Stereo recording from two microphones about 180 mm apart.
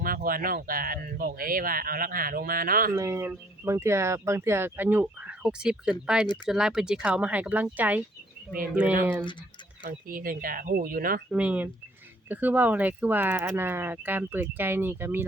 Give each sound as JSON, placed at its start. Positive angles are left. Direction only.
{"t": 0.0, "sound": "speech", "side_deg": -50}
{"t": 2.9, "sound": "speech", "side_deg": -15}
{"t": 9.8, "sound": "speech", "side_deg": -50}
{"t": 11.3, "sound": "speech", "side_deg": -5}